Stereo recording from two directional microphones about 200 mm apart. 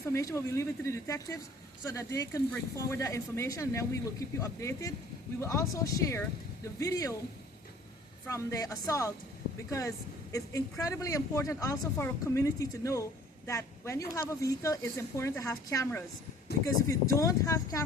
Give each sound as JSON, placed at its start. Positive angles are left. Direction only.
{"t": 0.0, "sound": "speech", "side_deg": 15}
{"t": 8.3, "sound": "speech", "side_deg": 15}
{"t": 17.2, "sound": "speech", "side_deg": 15}